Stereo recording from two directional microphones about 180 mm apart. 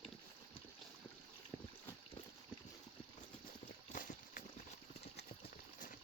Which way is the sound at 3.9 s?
45° left (ahead or behind).